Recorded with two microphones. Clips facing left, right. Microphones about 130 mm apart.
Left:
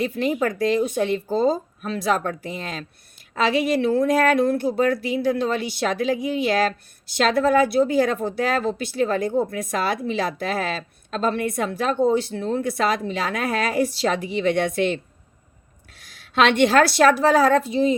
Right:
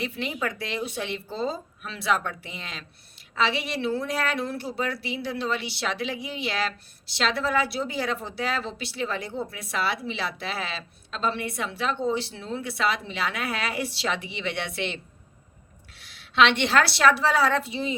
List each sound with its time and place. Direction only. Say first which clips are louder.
0.0 s a woman's voice: left 8 dB; 45° left (ahead or behind)